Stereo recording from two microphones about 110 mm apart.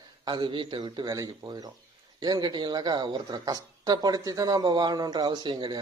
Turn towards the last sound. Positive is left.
turn(degrees=-45)  # may be behind; listen again after turning